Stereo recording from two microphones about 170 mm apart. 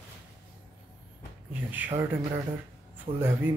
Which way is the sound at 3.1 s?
15° right (ahead or behind).